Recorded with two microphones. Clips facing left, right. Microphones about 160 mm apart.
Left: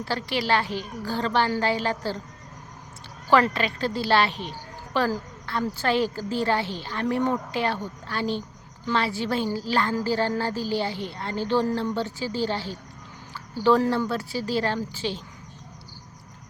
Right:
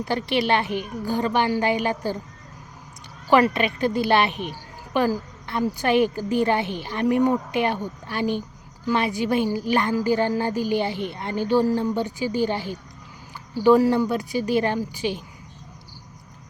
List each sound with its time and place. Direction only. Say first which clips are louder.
0.0 s a woman's voice: right 4 dB; 20° right (ahead or behind)
3.2 s a woman's voice: right 3 dB; 15° right (ahead or behind)